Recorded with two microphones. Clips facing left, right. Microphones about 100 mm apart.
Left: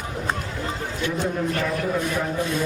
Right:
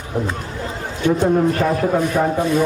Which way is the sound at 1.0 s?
50° right (ahead or behind).